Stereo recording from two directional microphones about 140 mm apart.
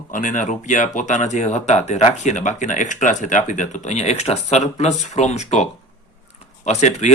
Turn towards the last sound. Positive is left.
turn(degrees=55)  # may be behind; listen again after turning